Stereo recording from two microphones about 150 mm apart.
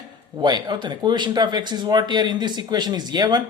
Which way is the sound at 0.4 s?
30° right (ahead or behind).